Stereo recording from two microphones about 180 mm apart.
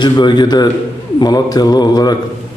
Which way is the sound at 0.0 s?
25° left (ahead or behind).